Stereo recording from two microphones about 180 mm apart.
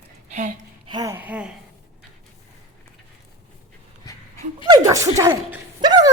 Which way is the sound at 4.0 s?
20° left (ahead or behind).